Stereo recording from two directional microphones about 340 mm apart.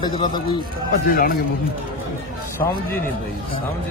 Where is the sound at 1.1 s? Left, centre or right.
Left.